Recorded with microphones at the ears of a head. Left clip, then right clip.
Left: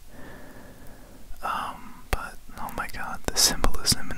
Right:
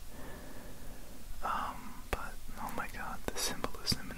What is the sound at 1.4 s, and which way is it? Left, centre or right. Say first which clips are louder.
Whispering: left 6 dB; left.